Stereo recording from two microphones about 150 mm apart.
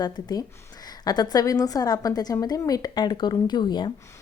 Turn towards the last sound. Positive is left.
turn(degrees=30)  # may be behind; listen again after turning